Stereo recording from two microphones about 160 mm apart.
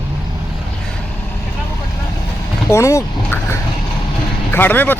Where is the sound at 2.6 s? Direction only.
20° left (ahead or behind).